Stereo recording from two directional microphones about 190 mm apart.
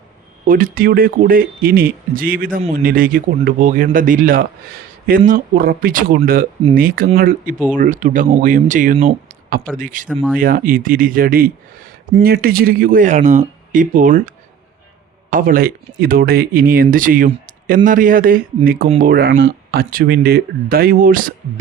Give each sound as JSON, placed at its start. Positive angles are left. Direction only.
{"t": 0.4, "sound": "speech", "side_deg": -45}
{"t": 10.1, "sound": "speech", "side_deg": 0}
{"t": 10.3, "sound": "speech", "side_deg": -50}